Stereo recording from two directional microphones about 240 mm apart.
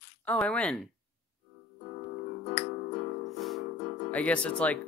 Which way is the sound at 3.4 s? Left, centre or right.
Centre.